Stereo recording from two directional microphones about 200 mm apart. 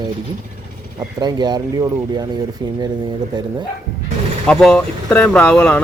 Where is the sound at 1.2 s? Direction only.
20° right (ahead or behind).